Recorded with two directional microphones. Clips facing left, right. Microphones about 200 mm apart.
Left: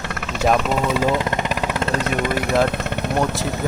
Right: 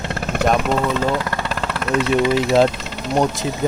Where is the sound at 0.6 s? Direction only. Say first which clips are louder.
Even; 10° left (ahead or behind).